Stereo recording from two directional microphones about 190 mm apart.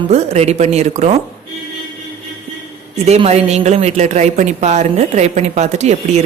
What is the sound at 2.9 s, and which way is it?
A woman's voice, 35° right (ahead or behind).